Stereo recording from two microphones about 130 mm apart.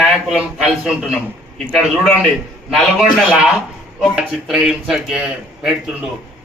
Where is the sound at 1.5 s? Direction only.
5° left (ahead or behind).